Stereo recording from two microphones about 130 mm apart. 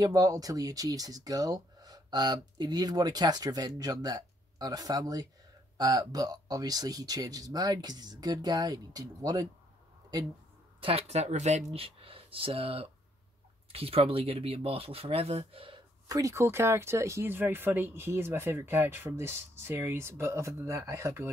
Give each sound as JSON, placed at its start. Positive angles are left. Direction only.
{"t": 0.0, "sound": "speech", "side_deg": -30}
{"t": 10.8, "sound": "speech", "side_deg": -45}
{"t": 16.1, "sound": "speech", "side_deg": -25}